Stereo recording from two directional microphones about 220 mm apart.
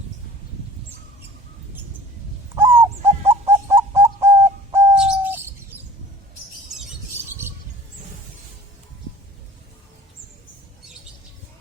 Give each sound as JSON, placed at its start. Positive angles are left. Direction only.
{"t": 2.6, "sound": "owl", "side_deg": -10}
{"t": 5.2, "sound": "bird", "side_deg": -10}